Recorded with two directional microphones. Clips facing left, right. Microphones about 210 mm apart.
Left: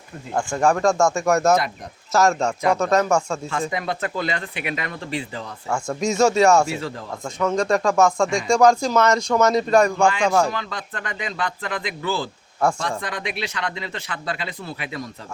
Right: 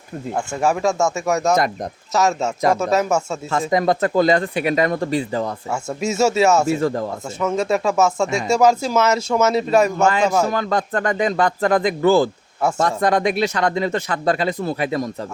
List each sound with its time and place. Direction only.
0.3 s speech: 5° right (ahead or behind)
3.5 s speech: 40° right (ahead or behind)
5.7 s speech: 5° right (ahead or behind)
6.7 s speech: 45° right (ahead or behind)
7.3 s speech: 5° right (ahead or behind)
10.5 s speech: 45° right (ahead or behind)